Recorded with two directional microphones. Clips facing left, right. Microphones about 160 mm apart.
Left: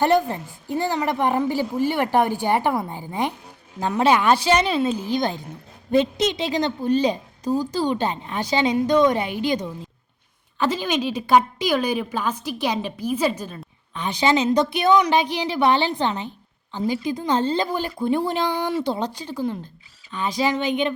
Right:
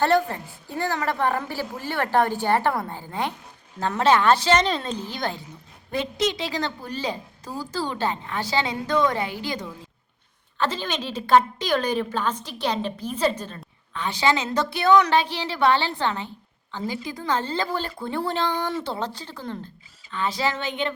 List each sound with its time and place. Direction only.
0.0 s a woman's voice: 15° left (ahead or behind)